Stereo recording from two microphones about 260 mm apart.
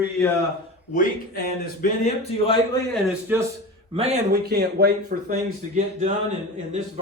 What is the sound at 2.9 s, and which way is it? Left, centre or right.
Speech, centre.